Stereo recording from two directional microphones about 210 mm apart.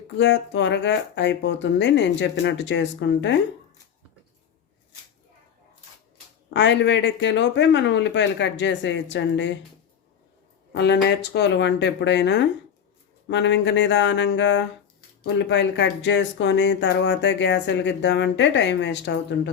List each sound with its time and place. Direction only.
0.2 s speech: 55° left (ahead or behind)
6.5 s speech: 55° left (ahead or behind)
10.7 s speech: 55° left (ahead or behind)